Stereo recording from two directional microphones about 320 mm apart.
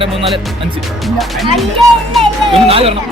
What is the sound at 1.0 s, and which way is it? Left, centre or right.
Speech, centre.